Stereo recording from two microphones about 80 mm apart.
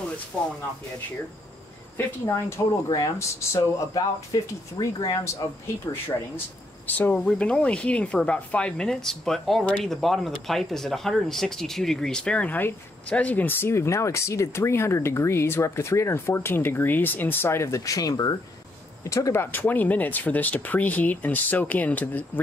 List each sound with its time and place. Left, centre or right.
0.3 s speech: centre
2.0 s speech: left
3.9 s speech: left
5.4 s speech: left
6.9 s speech: left
19.0 s speech: left
19.4 s speech: left